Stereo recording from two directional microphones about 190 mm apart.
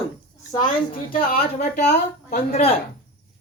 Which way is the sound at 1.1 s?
50° left (ahead or behind).